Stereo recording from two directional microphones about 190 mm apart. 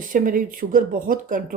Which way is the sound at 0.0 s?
45° right (ahead or behind).